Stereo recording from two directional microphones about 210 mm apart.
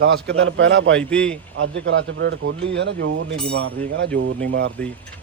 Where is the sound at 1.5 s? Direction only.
60° right (ahead or behind).